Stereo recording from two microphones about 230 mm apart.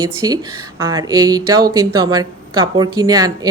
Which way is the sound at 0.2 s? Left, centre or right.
Centre.